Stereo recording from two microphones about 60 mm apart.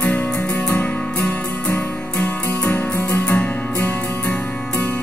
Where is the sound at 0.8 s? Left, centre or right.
Left.